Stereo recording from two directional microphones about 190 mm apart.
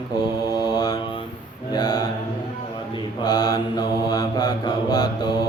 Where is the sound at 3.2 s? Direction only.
20° left (ahead or behind).